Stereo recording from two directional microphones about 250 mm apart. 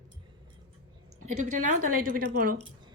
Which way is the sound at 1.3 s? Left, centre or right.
Right.